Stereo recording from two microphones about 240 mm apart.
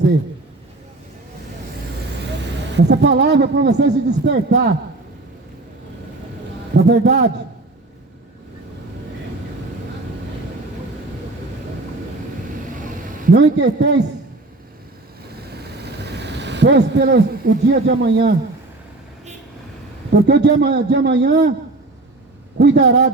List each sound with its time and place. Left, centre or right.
2.7 s a man's voice: right
6.8 s a man's voice: right
13.2 s a man's voice: right
16.0 s speech: right
20.1 s a man's voice: right
22.5 s a man's voice: right